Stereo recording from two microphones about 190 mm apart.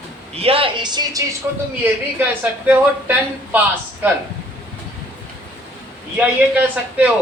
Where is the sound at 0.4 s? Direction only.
30° right (ahead or behind).